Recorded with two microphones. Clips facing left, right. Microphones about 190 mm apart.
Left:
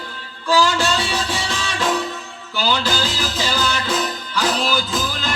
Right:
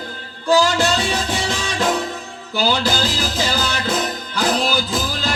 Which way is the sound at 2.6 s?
40° right (ahead or behind).